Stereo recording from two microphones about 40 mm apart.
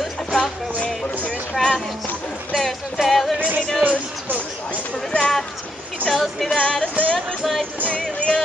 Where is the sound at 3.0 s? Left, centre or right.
Centre.